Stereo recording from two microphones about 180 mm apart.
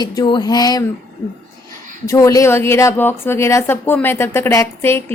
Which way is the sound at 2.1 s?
15° left (ahead or behind).